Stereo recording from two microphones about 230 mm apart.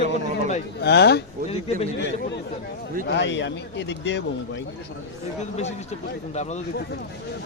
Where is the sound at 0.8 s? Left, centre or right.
Left.